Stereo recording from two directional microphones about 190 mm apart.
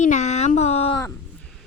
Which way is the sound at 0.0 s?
40° left (ahead or behind).